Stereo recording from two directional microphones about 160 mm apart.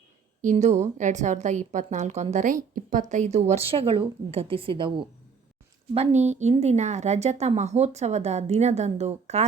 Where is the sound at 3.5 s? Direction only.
35° right (ahead or behind).